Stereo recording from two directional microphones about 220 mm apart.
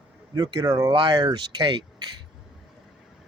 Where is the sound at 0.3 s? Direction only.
20° right (ahead or behind).